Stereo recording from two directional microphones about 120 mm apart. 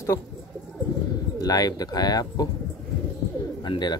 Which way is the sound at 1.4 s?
30° left (ahead or behind).